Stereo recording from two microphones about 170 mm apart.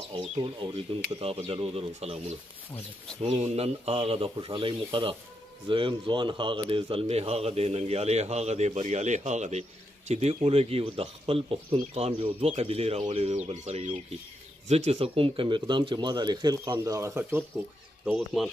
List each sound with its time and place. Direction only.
0.1 s a man's voice: 25° right (ahead or behind); by 18.5 s 5° right (ahead or behind)